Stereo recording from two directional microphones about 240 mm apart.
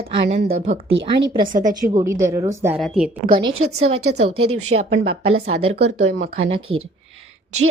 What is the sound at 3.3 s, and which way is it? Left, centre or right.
Speech, right.